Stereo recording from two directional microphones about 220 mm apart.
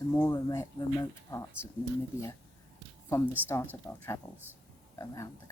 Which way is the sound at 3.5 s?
10° left (ahead or behind).